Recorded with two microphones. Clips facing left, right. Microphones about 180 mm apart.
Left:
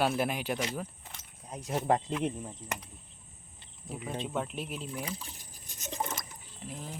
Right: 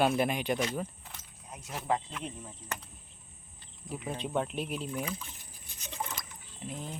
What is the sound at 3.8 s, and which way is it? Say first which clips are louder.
Speech: even; centre (ahead or behind).